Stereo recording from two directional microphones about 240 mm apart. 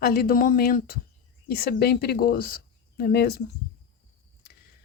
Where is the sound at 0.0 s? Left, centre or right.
Left.